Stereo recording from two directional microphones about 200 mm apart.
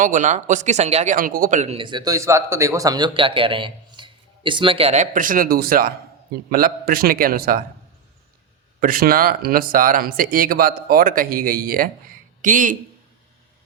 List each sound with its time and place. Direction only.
0.0 s speech: 40° right (ahead or behind)
8.8 s speech: 45° right (ahead or behind)